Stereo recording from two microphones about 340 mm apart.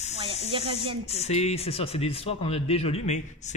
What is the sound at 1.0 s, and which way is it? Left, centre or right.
A man's voice, centre.